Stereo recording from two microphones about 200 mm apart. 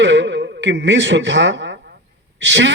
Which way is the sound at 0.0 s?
65° right (ahead or behind).